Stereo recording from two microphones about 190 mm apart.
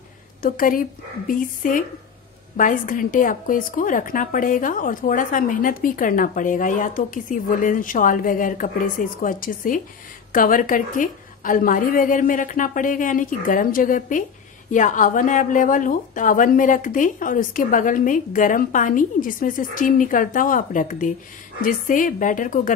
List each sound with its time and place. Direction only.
0.4 s a woman's voice: 45° left (ahead or behind)